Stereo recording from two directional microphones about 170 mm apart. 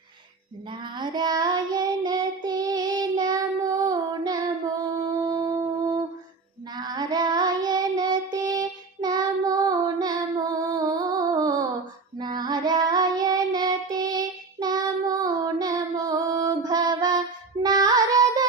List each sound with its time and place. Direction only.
0.7 s child singing: 25° right (ahead or behind)
17.6 s music: 25° right (ahead or behind)